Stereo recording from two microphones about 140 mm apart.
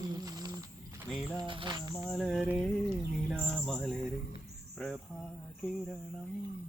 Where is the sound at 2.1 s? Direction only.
Centre (ahead or behind).